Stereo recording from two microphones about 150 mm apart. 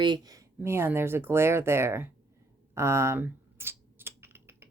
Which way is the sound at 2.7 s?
20° right (ahead or behind).